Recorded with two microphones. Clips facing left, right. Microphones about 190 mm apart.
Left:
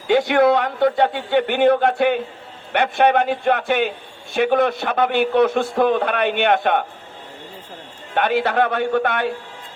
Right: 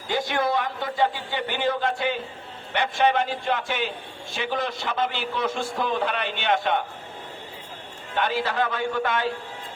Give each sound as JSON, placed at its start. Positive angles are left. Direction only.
{"t": 0.1, "sound": "a man's voice", "side_deg": 65}
{"t": 8.1, "sound": "a man's voice", "side_deg": 60}